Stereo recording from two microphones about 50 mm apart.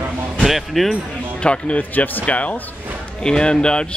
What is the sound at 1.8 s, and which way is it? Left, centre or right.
Speech, left.